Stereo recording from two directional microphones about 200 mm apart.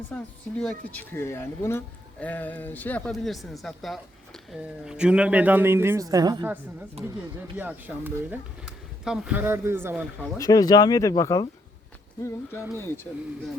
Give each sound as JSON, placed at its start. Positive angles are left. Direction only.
{"t": 0.1, "sound": "speech", "side_deg": 5}
{"t": 10.3, "sound": "speech", "side_deg": 20}